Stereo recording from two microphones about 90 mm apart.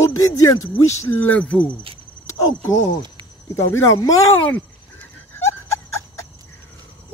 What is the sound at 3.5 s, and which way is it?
Speech, 35° left (ahead or behind).